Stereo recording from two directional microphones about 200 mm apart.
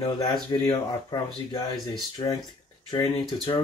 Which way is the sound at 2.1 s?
20° left (ahead or behind).